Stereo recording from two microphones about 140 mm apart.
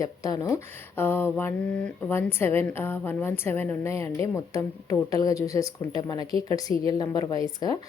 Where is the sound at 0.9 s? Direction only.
15° left (ahead or behind).